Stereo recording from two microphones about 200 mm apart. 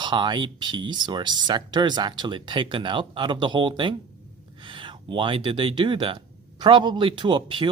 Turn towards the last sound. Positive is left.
turn(degrees=-25)  # may be behind; listen again after turning